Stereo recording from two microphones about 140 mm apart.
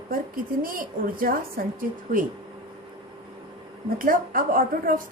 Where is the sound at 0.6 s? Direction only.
85° right.